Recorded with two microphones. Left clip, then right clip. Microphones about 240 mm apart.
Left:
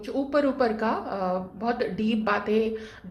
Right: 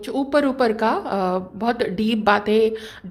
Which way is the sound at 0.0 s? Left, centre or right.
Right.